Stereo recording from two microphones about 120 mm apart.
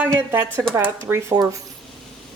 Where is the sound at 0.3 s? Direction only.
20° right (ahead or behind).